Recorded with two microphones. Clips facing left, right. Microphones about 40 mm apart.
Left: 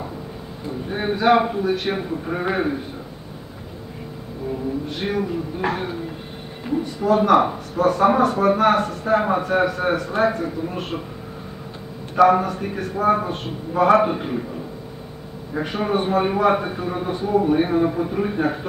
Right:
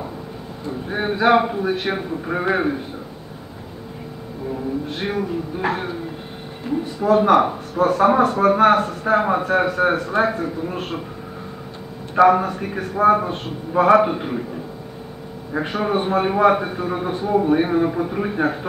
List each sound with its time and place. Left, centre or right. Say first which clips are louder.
0.7 s a man's voice: right 1 dB; centre
4.9 s speech: left 1 dB; centre
7.0 s a man's voice: right 1 dB; centre
12.2 s a man's voice: right 1 dB; centre
15.5 s a man's voice: right 1 dB; centre